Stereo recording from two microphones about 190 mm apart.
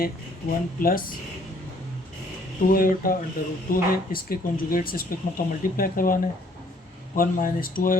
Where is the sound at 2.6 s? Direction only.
50° left (ahead or behind).